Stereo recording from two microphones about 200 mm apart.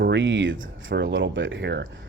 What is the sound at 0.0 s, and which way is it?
Speech, 65° right (ahead or behind).